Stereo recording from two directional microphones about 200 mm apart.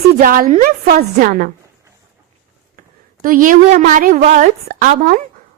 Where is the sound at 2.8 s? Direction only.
45° right (ahead or behind).